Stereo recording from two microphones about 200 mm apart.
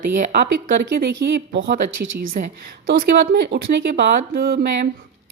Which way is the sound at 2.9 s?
50° right (ahead or behind).